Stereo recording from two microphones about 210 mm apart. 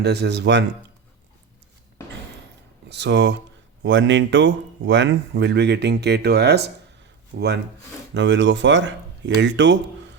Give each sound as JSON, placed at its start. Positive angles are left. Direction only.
{"t": 0.0, "sound": "speech", "side_deg": -50}
{"t": 2.9, "sound": "speech", "side_deg": -55}